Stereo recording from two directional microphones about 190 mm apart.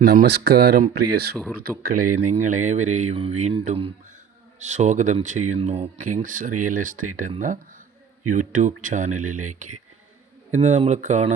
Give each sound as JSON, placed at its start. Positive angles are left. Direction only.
{"t": 0.0, "sound": "speech", "side_deg": -55}
{"t": 1.8, "sound": "speech", "side_deg": -45}